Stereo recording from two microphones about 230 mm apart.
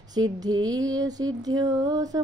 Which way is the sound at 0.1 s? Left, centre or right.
Centre.